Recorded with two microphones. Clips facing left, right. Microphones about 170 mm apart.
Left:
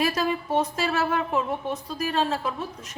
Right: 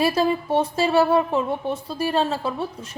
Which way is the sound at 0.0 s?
30° right (ahead or behind).